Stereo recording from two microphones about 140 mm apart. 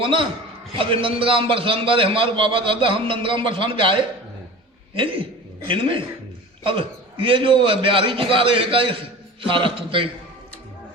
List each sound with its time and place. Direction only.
0.0 s a man's voice: 40° right (ahead or behind)